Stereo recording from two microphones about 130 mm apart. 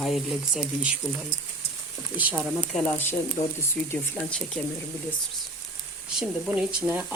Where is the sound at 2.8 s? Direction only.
15° left (ahead or behind).